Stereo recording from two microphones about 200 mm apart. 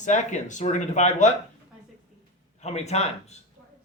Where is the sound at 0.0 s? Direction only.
35° left (ahead or behind).